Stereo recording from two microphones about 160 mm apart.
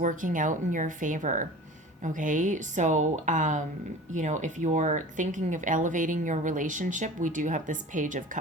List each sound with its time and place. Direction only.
0.0 s speech: 55° right (ahead or behind)